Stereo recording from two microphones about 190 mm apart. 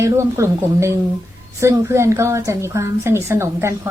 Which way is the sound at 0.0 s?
15° right (ahead or behind).